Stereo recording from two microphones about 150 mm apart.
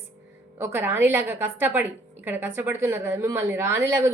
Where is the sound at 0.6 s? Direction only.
15° right (ahead or behind).